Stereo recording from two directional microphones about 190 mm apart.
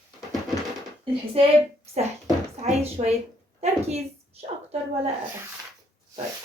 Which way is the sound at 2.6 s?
35° right (ahead or behind).